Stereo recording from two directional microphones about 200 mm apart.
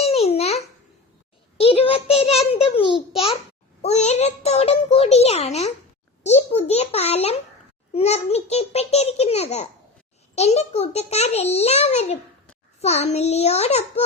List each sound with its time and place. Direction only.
0.0 s babbling: 30° left (ahead or behind)
1.5 s a child's voice: 30° left (ahead or behind)